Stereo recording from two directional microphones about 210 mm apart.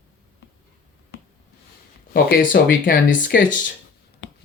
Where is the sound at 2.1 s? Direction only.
45° left (ahead or behind).